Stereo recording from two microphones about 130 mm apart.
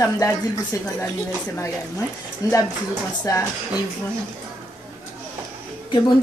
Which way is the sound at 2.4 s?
30° left (ahead or behind).